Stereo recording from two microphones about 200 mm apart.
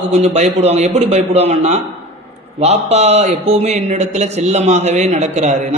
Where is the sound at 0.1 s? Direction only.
30° right (ahead or behind).